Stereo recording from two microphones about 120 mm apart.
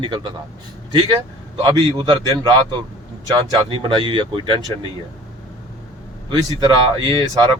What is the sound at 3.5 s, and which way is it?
Speech, 45° right (ahead or behind).